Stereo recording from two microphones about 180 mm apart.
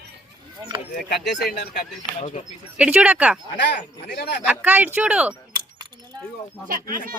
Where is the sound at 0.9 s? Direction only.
65° left (ahead or behind).